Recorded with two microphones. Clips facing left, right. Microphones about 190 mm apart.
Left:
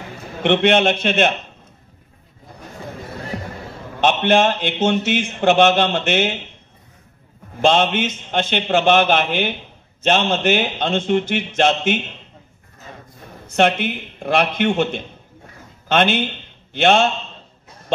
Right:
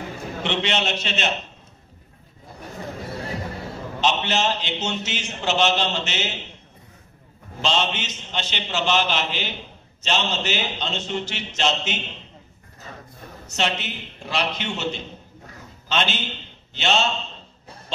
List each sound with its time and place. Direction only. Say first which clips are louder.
0.4 s speech: left 10 dB; 55° left (ahead or behind)
4.0 s speech: left 7 dB; 55° left (ahead or behind)
7.6 s speech: left 8 dB; 55° left (ahead or behind)
13.5 s speech: left 9 dB; 55° left (ahead or behind)